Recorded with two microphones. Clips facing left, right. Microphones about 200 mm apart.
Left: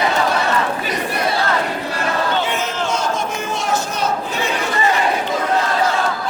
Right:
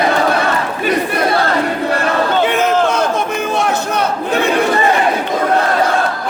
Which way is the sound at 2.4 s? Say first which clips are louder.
Right 8 dB; 60° right (ahead or behind).